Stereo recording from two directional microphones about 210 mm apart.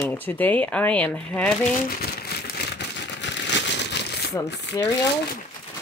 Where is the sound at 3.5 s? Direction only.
55° left (ahead or behind).